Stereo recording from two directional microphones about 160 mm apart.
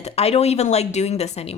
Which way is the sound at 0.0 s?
40° left (ahead or behind).